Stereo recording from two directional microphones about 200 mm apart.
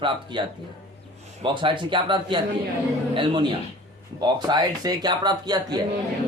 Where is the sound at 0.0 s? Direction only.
25° right (ahead or behind).